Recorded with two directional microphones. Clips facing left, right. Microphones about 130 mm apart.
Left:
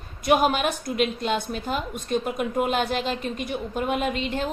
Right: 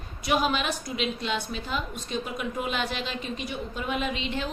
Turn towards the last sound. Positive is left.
turn(degrees=45)  # may be behind; listen again after turning